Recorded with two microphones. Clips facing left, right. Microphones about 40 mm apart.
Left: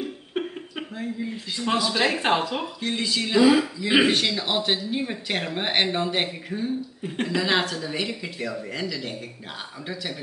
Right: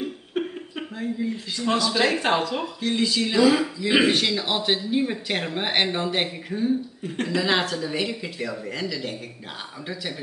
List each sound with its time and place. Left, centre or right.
0.3 s a sound: centre
1.9 s speech: centre
2.1 s speech: centre